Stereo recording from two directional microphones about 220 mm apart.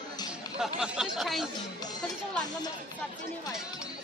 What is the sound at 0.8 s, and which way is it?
Speech, centre (ahead or behind).